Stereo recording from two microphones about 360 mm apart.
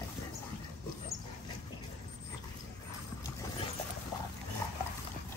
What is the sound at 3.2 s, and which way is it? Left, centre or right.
Vehicle, centre.